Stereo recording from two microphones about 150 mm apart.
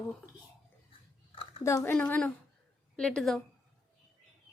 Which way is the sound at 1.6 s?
15° left (ahead or behind).